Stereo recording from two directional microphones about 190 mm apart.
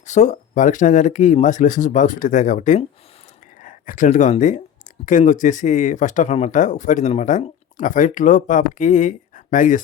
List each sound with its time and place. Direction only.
0.0 s speech: 40° left (ahead or behind)